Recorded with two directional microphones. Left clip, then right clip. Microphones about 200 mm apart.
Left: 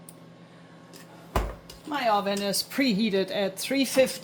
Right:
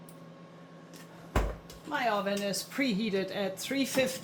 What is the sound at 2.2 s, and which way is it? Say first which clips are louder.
Speech: left 5 dB; 45° left (ahead or behind).